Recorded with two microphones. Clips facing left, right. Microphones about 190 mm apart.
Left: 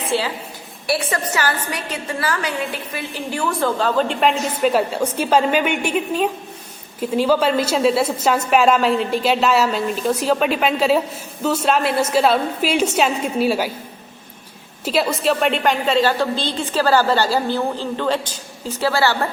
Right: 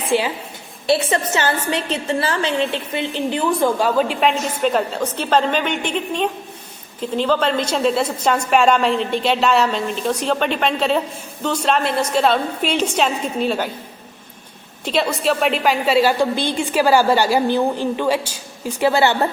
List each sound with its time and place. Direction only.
0.1 s a woman's voice: 15° right (ahead or behind); by 13.7 s 5° left (ahead or behind)
14.8 s a woman's voice: 5° left (ahead or behind); by 19.3 s 20° right (ahead or behind)